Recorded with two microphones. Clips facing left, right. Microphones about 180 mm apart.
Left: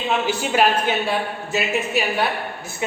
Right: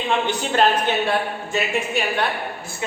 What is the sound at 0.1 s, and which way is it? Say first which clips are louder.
A man's voice: left 1 dB; 10° left (ahead or behind).